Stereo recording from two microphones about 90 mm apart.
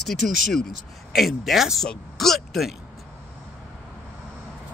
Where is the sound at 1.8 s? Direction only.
5° left (ahead or behind).